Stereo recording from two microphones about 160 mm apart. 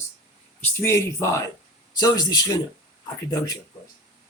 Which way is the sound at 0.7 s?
15° left (ahead or behind).